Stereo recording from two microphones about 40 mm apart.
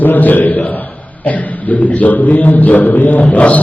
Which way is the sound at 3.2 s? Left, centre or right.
Left.